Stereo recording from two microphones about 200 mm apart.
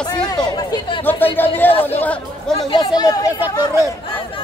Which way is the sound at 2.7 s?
20° left (ahead or behind).